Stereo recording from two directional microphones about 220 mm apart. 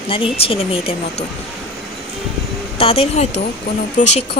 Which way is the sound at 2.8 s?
25° left (ahead or behind).